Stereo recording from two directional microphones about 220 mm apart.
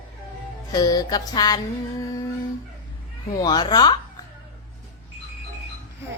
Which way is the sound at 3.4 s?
20° left (ahead or behind).